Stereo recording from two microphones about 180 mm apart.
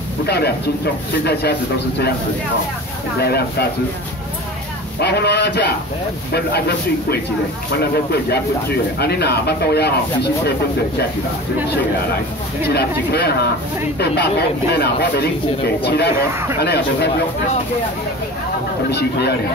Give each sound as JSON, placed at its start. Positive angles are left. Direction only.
{"t": 3.2, "sound": "speech", "side_deg": 60}
{"t": 5.0, "sound": "a man's voice", "side_deg": 65}
{"t": 7.9, "sound": "speech", "side_deg": 60}
{"t": 12.6, "sound": "speech", "side_deg": 60}
{"t": 18.9, "sound": "speech", "side_deg": 65}